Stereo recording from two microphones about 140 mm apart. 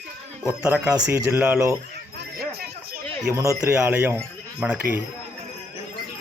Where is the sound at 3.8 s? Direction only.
10° right (ahead or behind).